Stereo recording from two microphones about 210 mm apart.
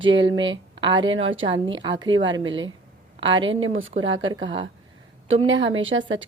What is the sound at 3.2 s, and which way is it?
Speech, 25° right (ahead or behind).